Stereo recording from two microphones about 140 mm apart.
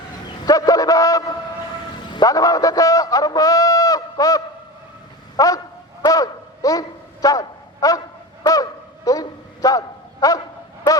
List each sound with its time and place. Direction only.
0.4 s a man's voice: 25° left (ahead or behind)
5.4 s honk: 25° left (ahead or behind)
6.1 s a sound: 25° left (ahead or behind)